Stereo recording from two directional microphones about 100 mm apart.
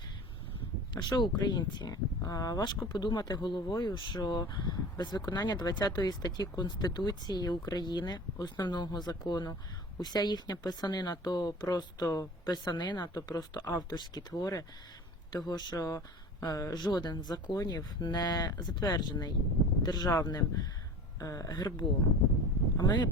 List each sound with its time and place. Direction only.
1.1 s speech: 45° left (ahead or behind)
12.0 s speech: 30° left (ahead or behind)
12.5 s speech: 45° left (ahead or behind)